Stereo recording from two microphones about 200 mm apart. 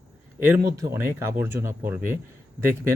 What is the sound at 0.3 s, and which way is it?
Speech, 10° right (ahead or behind).